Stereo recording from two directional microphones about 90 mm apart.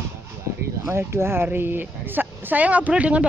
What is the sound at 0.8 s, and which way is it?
Speech, 30° right (ahead or behind).